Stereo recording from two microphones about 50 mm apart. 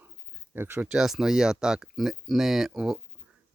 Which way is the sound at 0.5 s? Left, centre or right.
Right.